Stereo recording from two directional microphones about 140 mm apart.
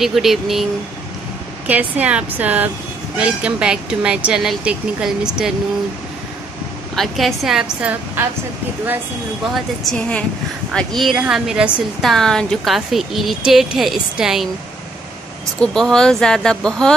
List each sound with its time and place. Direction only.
0.0 s speech: centre (ahead or behind)
1.7 s speech: 10° right (ahead or behind)
7.0 s speech: centre (ahead or behind)
9.5 s speech: 5° left (ahead or behind)
15.6 s speech: 5° left (ahead or behind)